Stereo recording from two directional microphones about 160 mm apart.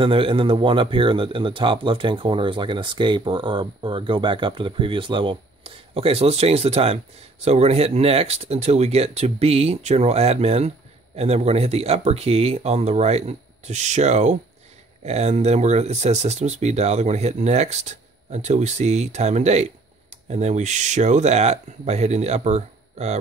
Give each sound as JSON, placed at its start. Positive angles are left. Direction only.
{"t": 0.0, "sound": "speech", "side_deg": -35}